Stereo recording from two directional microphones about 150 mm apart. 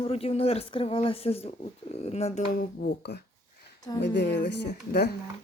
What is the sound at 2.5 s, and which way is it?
Speech, 75° left (ahead or behind).